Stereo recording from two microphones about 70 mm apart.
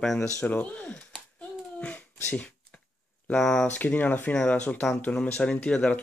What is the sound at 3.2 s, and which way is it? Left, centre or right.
Speech, centre.